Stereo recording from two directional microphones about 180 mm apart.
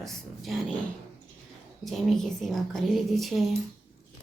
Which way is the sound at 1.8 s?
Centre (ahead or behind).